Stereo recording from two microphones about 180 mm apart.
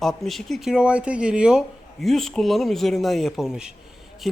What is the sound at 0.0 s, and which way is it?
A man's voice, centre (ahead or behind).